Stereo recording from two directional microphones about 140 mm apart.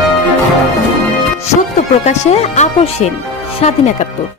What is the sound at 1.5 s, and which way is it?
Speech, 50° left (ahead or behind).